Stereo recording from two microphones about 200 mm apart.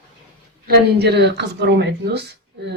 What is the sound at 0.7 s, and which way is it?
Speech, 55° right (ahead or behind).